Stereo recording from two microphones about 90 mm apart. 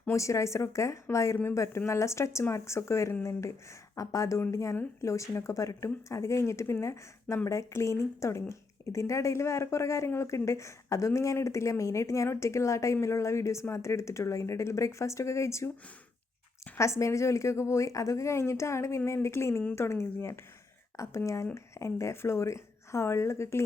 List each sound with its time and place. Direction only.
0.1 s speech: 35° left (ahead or behind)
16.7 s a woman's voice: 30° left (ahead or behind)